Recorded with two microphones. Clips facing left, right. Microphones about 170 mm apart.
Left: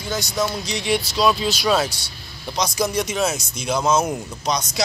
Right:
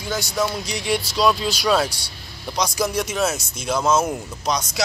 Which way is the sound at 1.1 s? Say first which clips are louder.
Right 1 dB; 5° left (ahead or behind).